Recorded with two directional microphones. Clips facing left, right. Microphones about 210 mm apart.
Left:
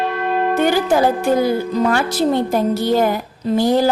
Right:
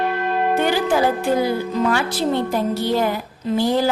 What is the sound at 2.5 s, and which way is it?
A woman's voice, 45° left (ahead or behind).